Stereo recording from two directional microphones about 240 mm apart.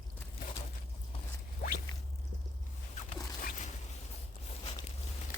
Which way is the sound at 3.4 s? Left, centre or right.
Left.